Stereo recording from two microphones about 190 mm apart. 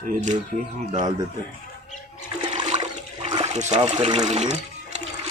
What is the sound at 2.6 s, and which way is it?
Toilet flush, 35° right (ahead or behind).